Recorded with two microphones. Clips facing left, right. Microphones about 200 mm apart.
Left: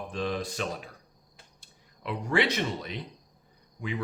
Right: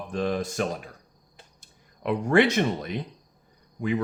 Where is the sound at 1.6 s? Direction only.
50° right (ahead or behind).